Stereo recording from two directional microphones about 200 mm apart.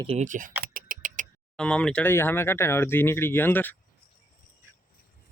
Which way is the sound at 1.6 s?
5° left (ahead or behind).